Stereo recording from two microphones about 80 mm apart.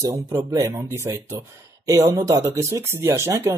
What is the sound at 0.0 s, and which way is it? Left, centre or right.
A man's voice, right.